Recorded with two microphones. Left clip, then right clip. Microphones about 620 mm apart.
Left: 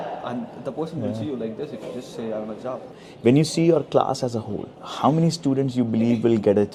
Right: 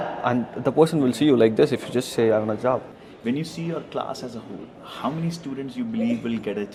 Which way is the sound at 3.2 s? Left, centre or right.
Left.